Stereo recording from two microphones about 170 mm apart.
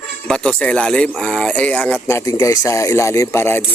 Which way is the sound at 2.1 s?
15° left (ahead or behind).